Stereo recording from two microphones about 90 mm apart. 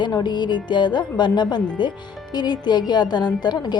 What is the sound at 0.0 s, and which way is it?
A woman's voice, 55° left (ahead or behind).